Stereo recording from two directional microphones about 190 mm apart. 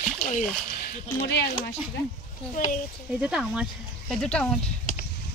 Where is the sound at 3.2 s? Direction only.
5° right (ahead or behind).